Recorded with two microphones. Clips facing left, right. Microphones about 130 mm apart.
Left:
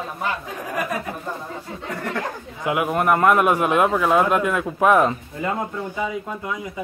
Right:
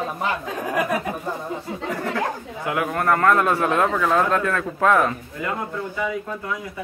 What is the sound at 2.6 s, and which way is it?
A man's voice, 20° left (ahead or behind).